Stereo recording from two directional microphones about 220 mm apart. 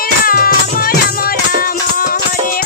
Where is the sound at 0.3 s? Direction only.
40° left (ahead or behind).